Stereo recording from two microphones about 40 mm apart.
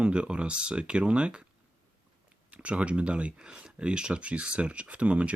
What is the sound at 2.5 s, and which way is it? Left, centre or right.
Speech, right.